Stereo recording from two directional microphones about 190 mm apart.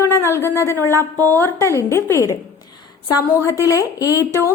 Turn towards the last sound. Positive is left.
turn(degrees=15)  # may be behind; listen again after turning